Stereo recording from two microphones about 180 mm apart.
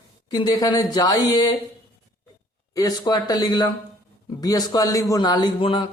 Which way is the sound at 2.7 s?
20° left (ahead or behind).